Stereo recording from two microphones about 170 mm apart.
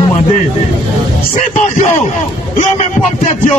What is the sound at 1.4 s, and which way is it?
Speech, 45° left (ahead or behind).